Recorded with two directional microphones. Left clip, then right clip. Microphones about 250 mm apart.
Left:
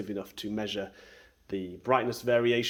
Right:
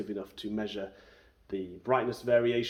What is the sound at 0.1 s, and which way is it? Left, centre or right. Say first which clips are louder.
Speech: left 1 dB; left.